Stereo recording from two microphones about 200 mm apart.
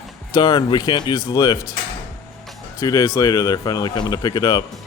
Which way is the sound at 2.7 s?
15° left (ahead or behind).